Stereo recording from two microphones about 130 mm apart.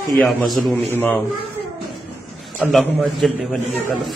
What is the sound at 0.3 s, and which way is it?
Speech, centre (ahead or behind).